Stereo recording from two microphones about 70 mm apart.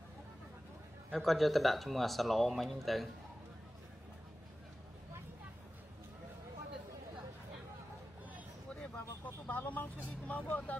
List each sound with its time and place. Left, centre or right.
1.1 s speech: centre
8.8 s vehicle: left